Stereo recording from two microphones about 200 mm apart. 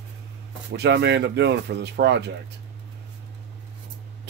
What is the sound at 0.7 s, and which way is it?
Speech, 55° right (ahead or behind).